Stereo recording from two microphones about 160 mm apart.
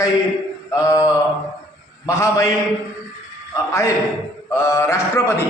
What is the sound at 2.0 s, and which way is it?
Speech, 20° left (ahead or behind).